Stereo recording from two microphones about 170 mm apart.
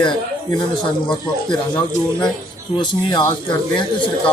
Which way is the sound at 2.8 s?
25° left (ahead or behind).